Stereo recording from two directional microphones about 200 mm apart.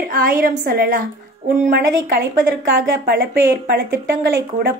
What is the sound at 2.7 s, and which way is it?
A woman's voice, 60° right (ahead or behind).